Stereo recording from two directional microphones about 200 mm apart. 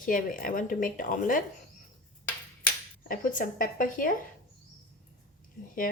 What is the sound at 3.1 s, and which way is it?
A woman's voice, 40° left (ahead or behind).